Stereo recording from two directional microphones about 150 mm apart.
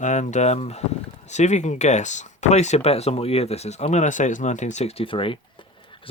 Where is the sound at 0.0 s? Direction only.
55° left (ahead or behind).